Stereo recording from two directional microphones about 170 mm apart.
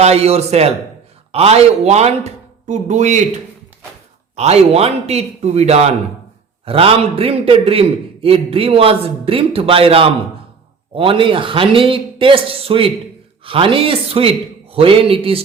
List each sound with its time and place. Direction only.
0.0 s a man's voice: 40° right (ahead or behind)
4.4 s a man's voice: 40° right (ahead or behind)